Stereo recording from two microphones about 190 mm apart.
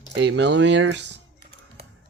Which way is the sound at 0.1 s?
65° right (ahead or behind).